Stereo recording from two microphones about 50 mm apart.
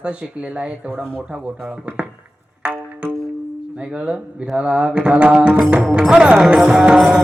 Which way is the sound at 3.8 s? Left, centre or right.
Right.